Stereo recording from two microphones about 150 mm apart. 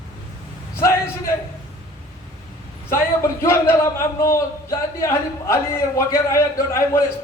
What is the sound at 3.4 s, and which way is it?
A man's voice, 15° left (ahead or behind).